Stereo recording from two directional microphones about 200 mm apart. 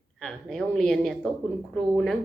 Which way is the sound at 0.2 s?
5° left (ahead or behind).